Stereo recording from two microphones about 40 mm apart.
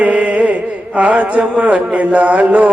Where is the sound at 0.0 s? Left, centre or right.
Right.